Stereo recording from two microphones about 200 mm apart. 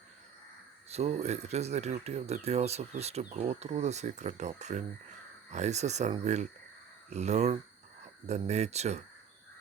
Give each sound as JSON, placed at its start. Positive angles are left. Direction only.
{"t": 0.9, "sound": "speech", "side_deg": -30}